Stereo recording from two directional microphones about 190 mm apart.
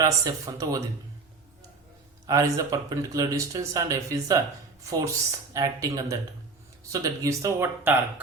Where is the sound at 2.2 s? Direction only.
15° right (ahead or behind).